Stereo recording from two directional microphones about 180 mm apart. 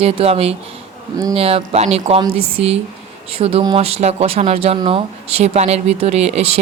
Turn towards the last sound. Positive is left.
turn(degrees=-35)  # may be behind; listen again after turning